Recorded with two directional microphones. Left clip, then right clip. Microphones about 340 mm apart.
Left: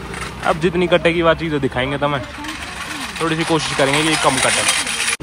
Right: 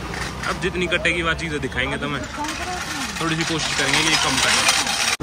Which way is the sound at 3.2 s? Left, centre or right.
Centre.